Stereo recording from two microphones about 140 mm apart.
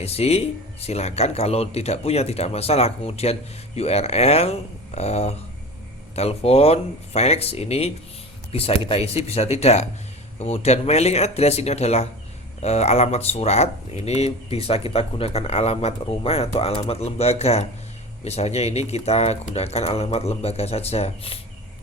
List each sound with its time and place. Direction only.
0.0 s speech: 50° left (ahead or behind)